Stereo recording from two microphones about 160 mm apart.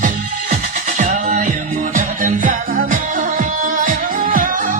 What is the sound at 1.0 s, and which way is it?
Music, 50° right (ahead or behind).